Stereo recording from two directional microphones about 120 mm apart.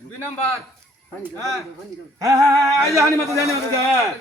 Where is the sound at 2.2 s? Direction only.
25° right (ahead or behind).